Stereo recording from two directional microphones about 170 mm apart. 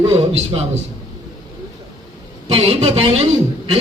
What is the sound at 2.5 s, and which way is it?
Speech, 35° right (ahead or behind).